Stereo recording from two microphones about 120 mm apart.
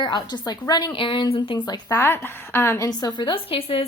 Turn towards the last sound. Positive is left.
turn(degrees=50)  # may be behind; listen again after turning